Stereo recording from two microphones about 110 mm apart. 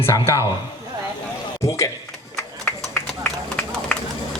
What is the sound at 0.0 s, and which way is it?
Speech, 25° left (ahead or behind).